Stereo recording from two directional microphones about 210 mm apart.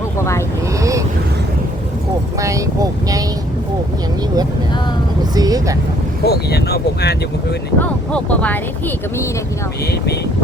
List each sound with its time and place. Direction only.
0.2 s vehicle: 15° left (ahead or behind)
0.8 s vehicle: 15° right (ahead or behind)
2.4 s vehicle: 15° right (ahead or behind)
5.3 s vehicle: 20° right (ahead or behind)
6.2 s speech: 50° left (ahead or behind)
7.8 s speech: 5° left (ahead or behind)